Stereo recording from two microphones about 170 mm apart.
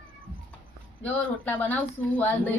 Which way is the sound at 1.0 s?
10° left (ahead or behind).